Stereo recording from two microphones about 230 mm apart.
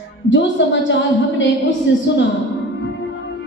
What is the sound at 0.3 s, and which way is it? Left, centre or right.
Speech, left.